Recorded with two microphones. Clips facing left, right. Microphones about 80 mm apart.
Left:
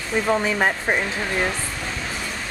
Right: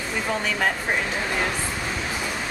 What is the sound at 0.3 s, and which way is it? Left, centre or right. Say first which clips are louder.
Speech: left 4 dB; left.